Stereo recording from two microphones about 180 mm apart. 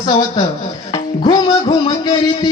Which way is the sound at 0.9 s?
25° left (ahead or behind).